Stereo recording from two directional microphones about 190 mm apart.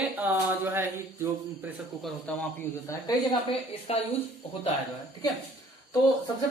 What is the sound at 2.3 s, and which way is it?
Speech, 5° left (ahead or behind).